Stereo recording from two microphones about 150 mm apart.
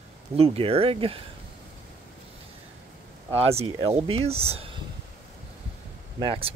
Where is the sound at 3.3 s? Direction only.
40° right (ahead or behind).